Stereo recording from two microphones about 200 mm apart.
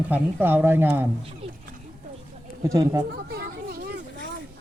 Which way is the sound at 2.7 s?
15° right (ahead or behind).